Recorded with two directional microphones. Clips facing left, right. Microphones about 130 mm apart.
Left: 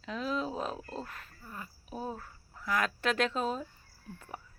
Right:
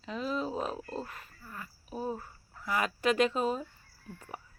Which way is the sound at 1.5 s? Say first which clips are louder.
Even; 25° left (ahead or behind).